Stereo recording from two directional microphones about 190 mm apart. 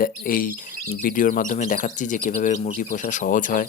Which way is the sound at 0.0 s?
45° left (ahead or behind).